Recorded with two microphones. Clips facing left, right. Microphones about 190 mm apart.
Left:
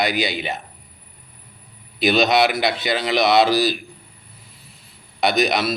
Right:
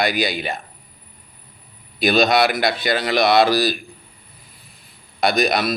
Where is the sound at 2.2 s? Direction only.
20° left (ahead or behind).